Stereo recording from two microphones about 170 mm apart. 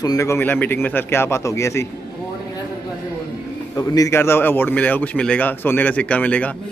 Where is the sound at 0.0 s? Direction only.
20° left (ahead or behind).